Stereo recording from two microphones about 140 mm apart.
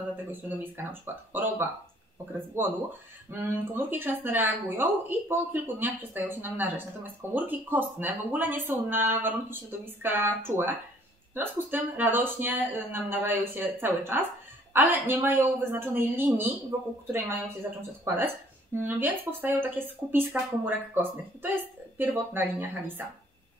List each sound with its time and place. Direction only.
0.1 s speech: 15° right (ahead or behind)